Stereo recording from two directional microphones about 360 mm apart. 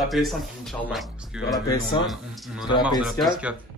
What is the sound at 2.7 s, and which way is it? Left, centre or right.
Speech, centre.